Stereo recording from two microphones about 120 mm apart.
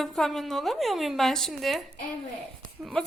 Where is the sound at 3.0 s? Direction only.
5° left (ahead or behind).